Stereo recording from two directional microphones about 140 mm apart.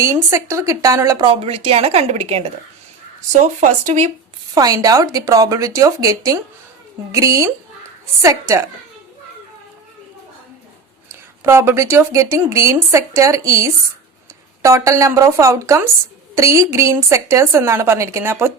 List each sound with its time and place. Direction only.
0.0 s speech: 20° right (ahead or behind)
1.3 s a woman's voice: 45° right (ahead or behind)
3.4 s speech: 60° right (ahead or behind)
4.5 s speech: 25° right (ahead or behind)
11.1 s speech: 20° right (ahead or behind)